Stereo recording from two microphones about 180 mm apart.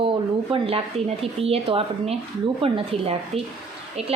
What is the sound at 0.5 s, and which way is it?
A woman's voice, 30° right (ahead or behind).